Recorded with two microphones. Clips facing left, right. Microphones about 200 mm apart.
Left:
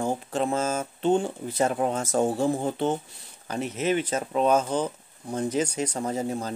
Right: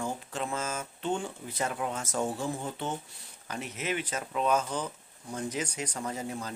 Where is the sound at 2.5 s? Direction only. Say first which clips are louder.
Left 9 dB; 45° left (ahead or behind).